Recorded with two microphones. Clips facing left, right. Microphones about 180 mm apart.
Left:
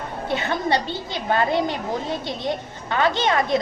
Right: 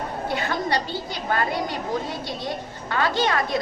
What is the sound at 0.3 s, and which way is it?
A woman's voice, 25° left (ahead or behind).